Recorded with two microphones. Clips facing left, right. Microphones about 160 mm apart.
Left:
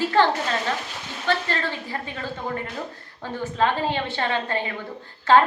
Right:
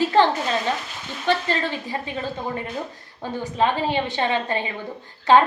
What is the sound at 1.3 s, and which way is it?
A woman's voice, 20° right (ahead or behind).